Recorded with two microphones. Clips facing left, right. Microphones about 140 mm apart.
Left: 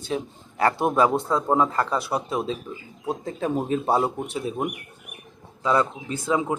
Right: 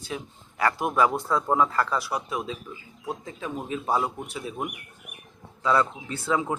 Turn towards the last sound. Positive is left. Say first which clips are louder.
# left 2 dB
turn(degrees=20)  # may be behind; listen again after turning